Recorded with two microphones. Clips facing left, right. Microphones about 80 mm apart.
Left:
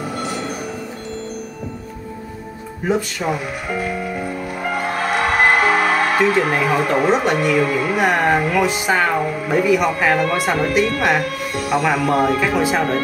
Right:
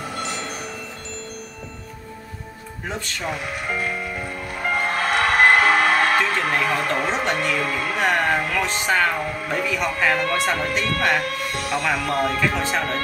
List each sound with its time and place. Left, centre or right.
0.2 s tubular bells: left
2.9 s speech: centre
4.7 s speech: centre